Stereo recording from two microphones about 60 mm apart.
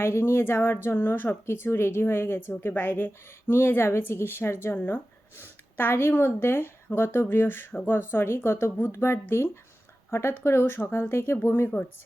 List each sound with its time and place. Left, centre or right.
0.0 s a woman's voice: left